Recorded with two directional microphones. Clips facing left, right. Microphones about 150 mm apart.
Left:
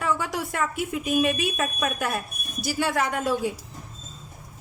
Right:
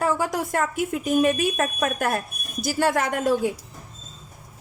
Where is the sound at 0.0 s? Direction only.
45° right (ahead or behind).